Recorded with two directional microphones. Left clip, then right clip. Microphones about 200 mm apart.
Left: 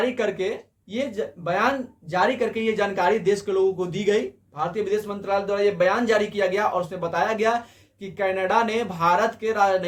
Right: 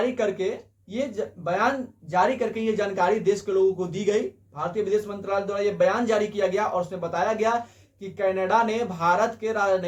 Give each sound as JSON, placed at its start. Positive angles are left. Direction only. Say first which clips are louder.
{"t": 0.0, "sound": "speech", "louder": "left 1 dB", "side_deg": 20}